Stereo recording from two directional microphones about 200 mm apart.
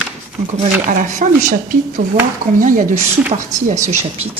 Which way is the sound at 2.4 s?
40° right (ahead or behind).